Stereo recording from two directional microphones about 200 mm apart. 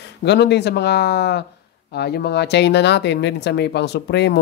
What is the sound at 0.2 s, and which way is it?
Speech, 55° left (ahead or behind).